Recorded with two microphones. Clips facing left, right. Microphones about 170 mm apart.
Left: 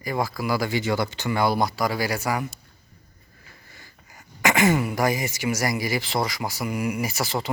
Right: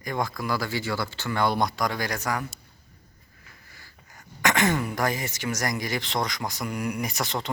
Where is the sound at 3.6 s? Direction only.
25° left (ahead or behind).